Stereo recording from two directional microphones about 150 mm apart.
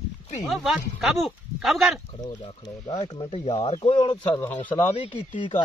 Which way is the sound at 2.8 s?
30° left (ahead or behind).